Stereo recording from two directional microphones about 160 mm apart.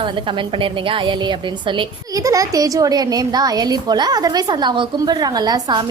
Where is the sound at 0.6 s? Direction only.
30° right (ahead or behind).